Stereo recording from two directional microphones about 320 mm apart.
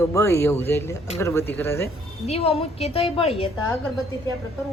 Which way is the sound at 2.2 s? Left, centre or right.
Centre.